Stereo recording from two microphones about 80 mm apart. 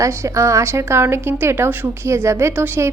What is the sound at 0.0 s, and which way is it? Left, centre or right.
A woman's voice, right.